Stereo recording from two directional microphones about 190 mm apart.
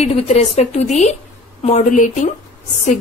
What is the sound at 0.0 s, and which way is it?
Speech, 35° left (ahead or behind).